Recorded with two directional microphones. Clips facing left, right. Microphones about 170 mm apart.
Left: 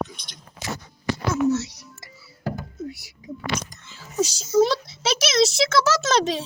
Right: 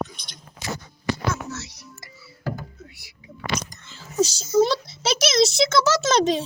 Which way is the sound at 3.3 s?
5° left (ahead or behind).